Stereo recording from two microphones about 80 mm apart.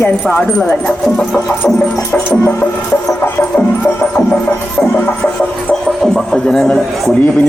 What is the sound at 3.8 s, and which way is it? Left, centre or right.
Music, left.